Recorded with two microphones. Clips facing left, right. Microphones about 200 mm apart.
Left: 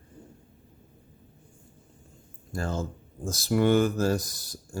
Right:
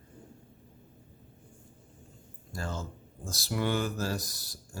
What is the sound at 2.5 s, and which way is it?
Speech, 50° left (ahead or behind).